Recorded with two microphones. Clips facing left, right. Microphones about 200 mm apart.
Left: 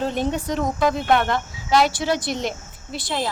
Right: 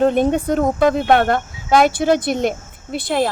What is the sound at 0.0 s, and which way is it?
Speech, 55° right (ahead or behind).